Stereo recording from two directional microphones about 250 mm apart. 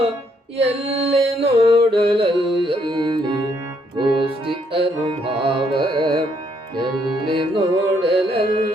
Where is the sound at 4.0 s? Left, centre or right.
Centre.